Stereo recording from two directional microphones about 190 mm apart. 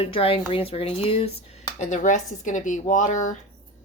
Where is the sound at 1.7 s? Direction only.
40° left (ahead or behind).